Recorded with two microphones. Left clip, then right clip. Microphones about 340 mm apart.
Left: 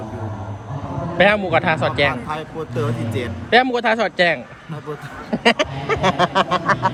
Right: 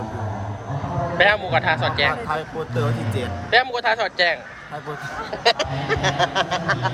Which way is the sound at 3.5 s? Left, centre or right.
Centre.